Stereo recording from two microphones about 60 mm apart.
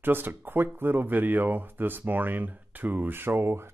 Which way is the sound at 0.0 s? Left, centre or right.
Right.